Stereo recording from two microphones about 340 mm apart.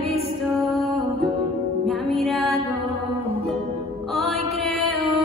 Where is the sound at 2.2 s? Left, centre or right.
Centre.